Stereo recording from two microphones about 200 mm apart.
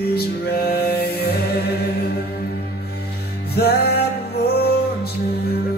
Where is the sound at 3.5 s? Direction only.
50° left (ahead or behind).